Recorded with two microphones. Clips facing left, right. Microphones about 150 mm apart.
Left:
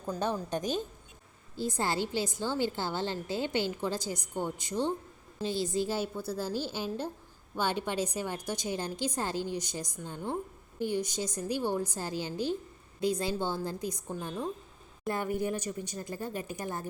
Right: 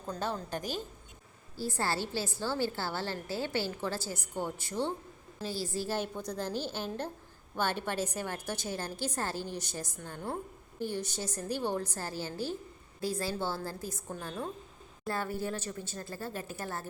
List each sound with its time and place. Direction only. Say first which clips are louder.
0.2 s a woman's voice: left 4 dB; 20° left (ahead or behind)